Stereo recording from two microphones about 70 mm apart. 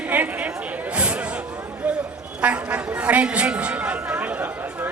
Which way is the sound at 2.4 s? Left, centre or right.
Centre.